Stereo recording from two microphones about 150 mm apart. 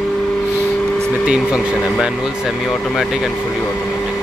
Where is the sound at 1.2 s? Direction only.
5° right (ahead or behind).